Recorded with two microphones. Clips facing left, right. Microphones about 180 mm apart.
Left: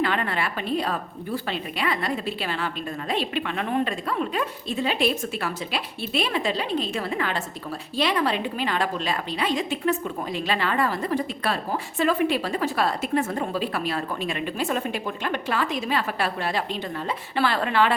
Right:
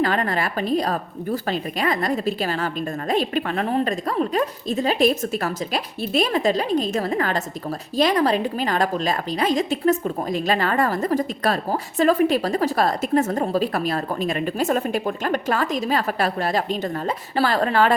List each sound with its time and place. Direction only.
0.0 s a woman's voice: 40° right (ahead or behind)